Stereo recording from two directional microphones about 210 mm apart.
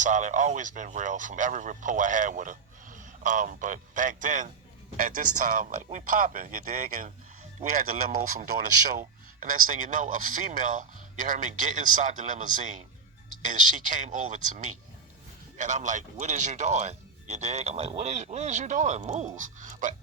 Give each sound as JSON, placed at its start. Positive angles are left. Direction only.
{"t": 0.0, "sound": "speech", "side_deg": -35}